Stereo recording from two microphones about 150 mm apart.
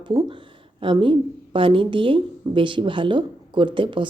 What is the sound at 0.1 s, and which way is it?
A woman's voice, 35° right (ahead or behind).